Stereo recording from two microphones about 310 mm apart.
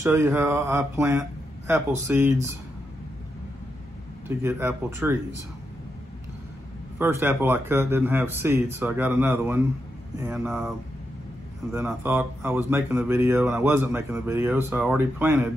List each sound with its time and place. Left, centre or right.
0.0 s speech: centre
4.4 s speech: centre
7.0 s speech: centre
11.7 s speech: centre